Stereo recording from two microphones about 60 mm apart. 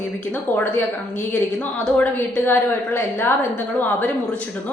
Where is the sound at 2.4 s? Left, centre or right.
Left.